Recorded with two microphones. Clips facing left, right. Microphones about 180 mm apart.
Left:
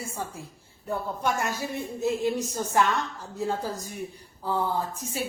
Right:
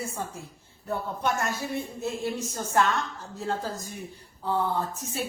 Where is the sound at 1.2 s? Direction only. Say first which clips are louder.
Even; 15° left (ahead or behind).